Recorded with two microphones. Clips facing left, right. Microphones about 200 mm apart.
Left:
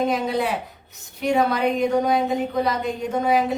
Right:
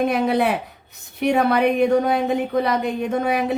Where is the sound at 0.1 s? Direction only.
60° right (ahead or behind).